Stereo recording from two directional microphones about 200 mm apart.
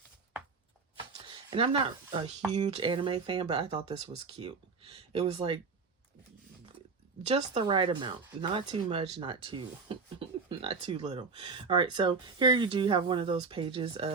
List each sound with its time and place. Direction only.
1.5 s speech: 30° right (ahead or behind)
7.3 s speech: 25° right (ahead or behind)